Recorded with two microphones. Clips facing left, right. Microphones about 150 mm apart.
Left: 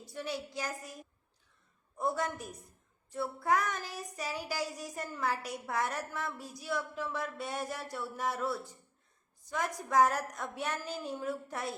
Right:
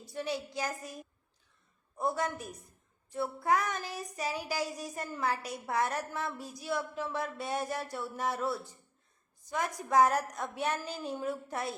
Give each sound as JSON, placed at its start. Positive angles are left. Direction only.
{"t": 0.1, "sound": "child singing", "side_deg": -20}
{"t": 2.0, "sound": "child singing", "side_deg": -20}